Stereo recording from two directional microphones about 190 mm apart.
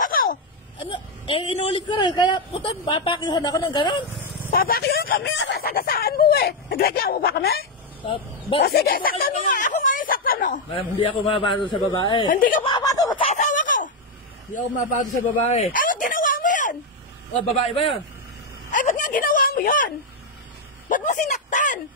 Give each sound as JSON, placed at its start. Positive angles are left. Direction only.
{"t": 0.0, "sound": "a sound", "side_deg": 45}
{"t": 0.7, "sound": "a woman's voice", "side_deg": 25}
{"t": 4.5, "sound": "speech", "side_deg": 50}
{"t": 5.2, "sound": "speech", "side_deg": 80}
{"t": 8.0, "sound": "speech", "side_deg": 25}
{"t": 8.6, "sound": "speech", "side_deg": 55}
{"t": 10.7, "sound": "a woman's voice", "side_deg": 25}
{"t": 12.3, "sound": "speech", "side_deg": 45}
{"t": 12.6, "sound": "speech", "side_deg": 20}
{"t": 13.3, "sound": "a sound", "side_deg": 40}
{"t": 17.6, "sound": "a man's voice", "side_deg": 30}
{"t": 18.7, "sound": "a sound", "side_deg": 40}
{"t": 20.9, "sound": "a sound", "side_deg": 45}